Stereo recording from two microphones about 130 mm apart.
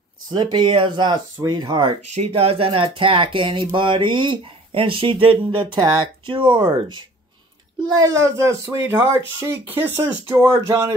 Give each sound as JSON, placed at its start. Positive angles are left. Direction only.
{"t": 0.3, "sound": "speech", "side_deg": -35}
{"t": 2.0, "sound": "speech", "side_deg": -55}
{"t": 7.9, "sound": "speech", "side_deg": -25}